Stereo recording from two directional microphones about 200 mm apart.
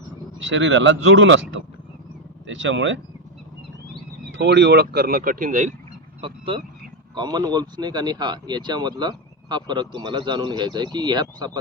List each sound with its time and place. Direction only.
0.4 s speech: 65° right (ahead or behind)
4.3 s speech: 60° right (ahead or behind); by 5.7 s 40° right (ahead or behind)
6.2 s speech: 25° right (ahead or behind)